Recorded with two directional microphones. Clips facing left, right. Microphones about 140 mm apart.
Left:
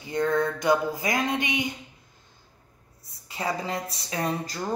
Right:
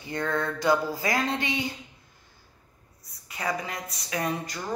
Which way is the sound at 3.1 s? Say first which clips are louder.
Left 1 dB; 25° left (ahead or behind).